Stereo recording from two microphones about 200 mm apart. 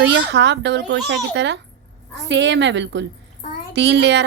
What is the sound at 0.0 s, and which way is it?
A child's voice, 60° right (ahead or behind).